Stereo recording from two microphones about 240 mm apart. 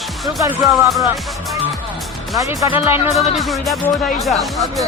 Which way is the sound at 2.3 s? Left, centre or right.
Centre.